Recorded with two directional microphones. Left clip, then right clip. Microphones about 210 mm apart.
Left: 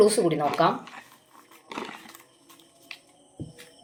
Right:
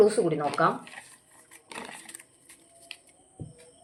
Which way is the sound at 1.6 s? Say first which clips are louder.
Left 4 dB; 10° left (ahead or behind).